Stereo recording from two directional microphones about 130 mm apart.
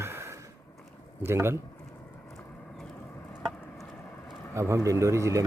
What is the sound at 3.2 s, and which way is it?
Chop, 15° left (ahead or behind).